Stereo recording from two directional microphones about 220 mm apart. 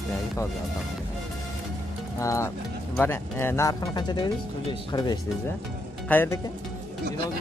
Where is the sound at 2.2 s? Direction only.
15° left (ahead or behind).